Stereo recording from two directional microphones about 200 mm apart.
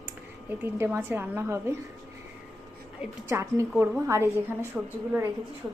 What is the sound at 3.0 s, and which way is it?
Speech, 15° right (ahead or behind).